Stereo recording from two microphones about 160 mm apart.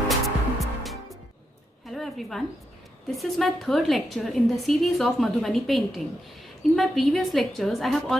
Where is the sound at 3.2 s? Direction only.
Centre (ahead or behind).